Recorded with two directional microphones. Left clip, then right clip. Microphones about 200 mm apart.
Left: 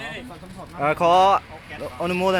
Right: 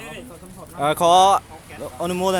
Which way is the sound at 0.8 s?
20° right (ahead or behind).